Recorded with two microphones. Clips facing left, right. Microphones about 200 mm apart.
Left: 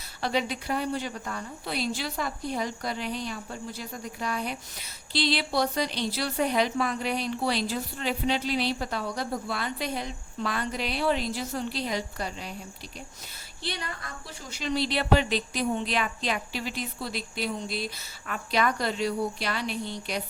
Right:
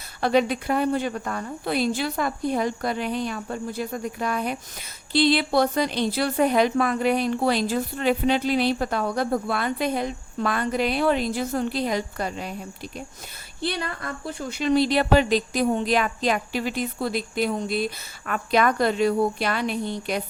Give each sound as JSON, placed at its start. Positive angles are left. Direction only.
{"t": 0.2, "sound": "a woman's voice", "side_deg": -55}
{"t": 13.7, "sound": "a woman's voice", "side_deg": -60}